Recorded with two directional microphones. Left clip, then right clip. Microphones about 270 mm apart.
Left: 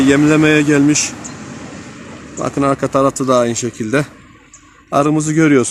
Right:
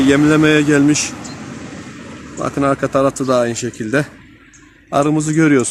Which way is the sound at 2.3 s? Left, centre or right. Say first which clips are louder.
Left 1 dB; left.